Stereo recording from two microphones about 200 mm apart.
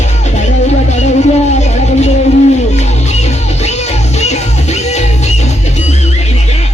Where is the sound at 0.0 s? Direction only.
35° left (ahead or behind).